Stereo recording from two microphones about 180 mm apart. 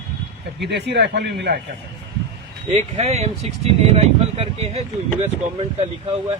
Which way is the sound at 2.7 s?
40° right (ahead or behind).